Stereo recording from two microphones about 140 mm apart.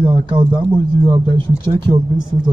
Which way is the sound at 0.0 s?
35° right (ahead or behind).